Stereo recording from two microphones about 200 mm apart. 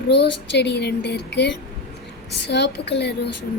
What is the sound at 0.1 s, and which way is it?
Speech, 55° left (ahead or behind).